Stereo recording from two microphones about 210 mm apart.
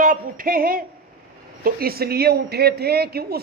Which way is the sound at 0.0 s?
40° right (ahead or behind).